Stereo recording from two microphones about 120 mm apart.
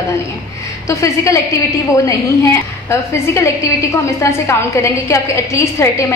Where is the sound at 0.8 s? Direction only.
25° left (ahead or behind).